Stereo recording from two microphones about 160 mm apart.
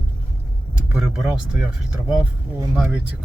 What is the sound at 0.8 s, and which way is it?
Speech, 5° right (ahead or behind).